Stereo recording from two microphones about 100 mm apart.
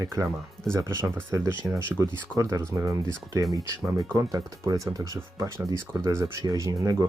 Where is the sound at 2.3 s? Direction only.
35° right (ahead or behind).